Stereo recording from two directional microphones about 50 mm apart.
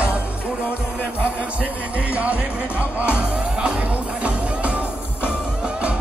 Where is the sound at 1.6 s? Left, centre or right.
Right.